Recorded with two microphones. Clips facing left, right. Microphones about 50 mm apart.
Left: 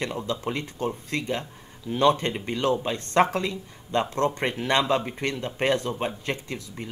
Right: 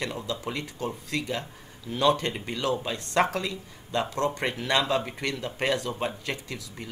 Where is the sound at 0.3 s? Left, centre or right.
Left.